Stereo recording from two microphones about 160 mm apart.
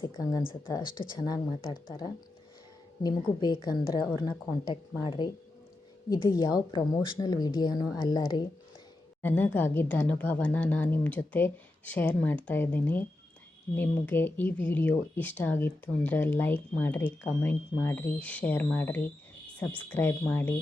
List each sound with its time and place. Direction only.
0.0 s speech: 20° left (ahead or behind)
6.7 s speech: 30° left (ahead or behind)
9.2 s speech: 10° left (ahead or behind)